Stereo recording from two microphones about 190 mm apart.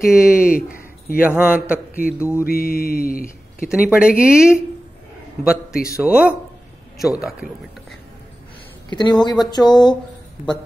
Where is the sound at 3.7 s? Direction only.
5° right (ahead or behind).